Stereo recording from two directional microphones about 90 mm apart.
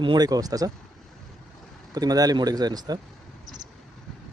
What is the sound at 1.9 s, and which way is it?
Speech, 45° right (ahead or behind).